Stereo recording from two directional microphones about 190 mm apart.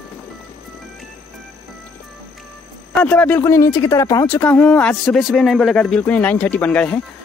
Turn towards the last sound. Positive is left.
turn(degrees=5)  # may be behind; listen again after turning